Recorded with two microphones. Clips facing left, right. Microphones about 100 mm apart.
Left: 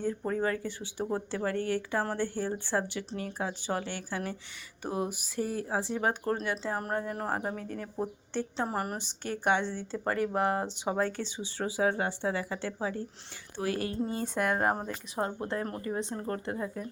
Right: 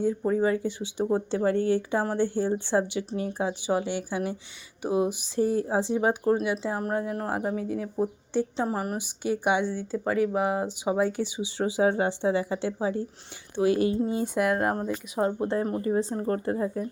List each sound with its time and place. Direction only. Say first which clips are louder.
0.0 s a woman's voice: right 6 dB; 10° right (ahead or behind)
8.6 s a woman's voice: right 4 dB; centre (ahead or behind)
15.1 s speech: right 6 dB; 20° right (ahead or behind)